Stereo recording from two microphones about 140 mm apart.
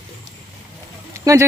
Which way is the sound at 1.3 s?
25° right (ahead or behind).